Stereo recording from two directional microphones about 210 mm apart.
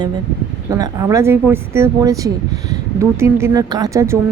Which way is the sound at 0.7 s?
15° right (ahead or behind).